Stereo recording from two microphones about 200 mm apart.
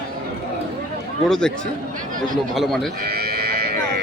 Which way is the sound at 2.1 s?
40° right (ahead or behind).